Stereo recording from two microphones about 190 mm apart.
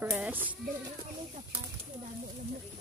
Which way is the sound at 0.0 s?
10° right (ahead or behind).